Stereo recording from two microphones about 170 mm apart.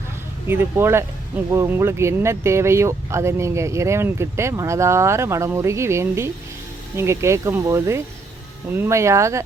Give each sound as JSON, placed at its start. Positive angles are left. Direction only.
{"t": 0.4, "sound": "speech", "side_deg": -15}